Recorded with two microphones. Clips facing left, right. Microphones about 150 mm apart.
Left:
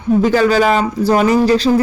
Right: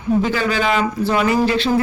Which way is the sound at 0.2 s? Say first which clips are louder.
Left 7 dB; 40° left (ahead or behind).